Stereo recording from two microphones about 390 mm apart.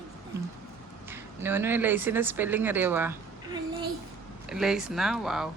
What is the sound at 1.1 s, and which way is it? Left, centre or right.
Speech, centre.